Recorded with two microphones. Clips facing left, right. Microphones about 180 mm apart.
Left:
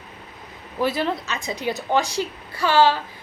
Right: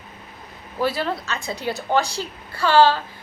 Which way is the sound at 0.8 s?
20° left (ahead or behind).